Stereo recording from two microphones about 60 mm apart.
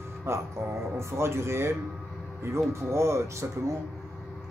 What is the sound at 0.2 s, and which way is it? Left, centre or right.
A man's voice, right.